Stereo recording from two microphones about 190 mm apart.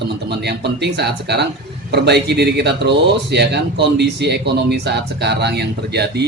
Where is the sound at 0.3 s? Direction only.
60° right (ahead or behind).